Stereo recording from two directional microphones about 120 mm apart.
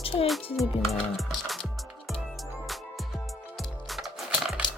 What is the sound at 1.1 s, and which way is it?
Music, centre (ahead or behind).